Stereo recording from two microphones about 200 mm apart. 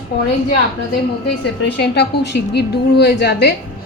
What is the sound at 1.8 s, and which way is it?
A woman's voice, 55° left (ahead or behind).